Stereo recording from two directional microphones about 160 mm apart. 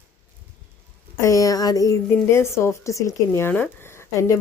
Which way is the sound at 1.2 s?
20° left (ahead or behind).